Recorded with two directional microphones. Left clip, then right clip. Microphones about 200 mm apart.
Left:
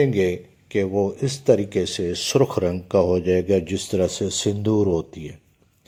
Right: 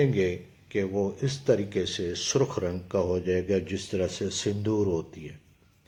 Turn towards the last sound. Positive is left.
turn(degrees=35)  # may be behind; listen again after turning